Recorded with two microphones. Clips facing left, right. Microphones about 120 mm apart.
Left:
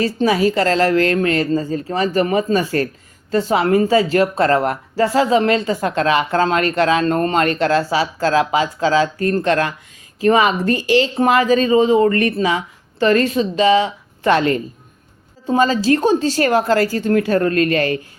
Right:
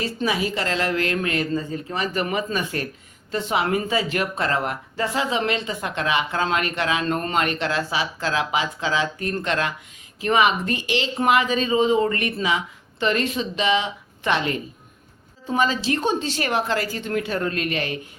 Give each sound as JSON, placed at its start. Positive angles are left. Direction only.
{"t": 0.0, "sound": "speech", "side_deg": 40}